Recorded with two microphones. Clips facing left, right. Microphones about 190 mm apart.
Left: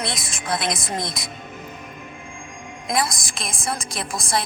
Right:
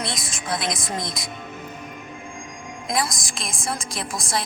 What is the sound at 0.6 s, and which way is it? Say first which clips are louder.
Speech: left 2 dB; 60° left (ahead or behind).